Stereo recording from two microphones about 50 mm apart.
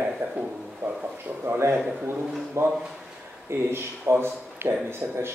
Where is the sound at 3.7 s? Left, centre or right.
Right.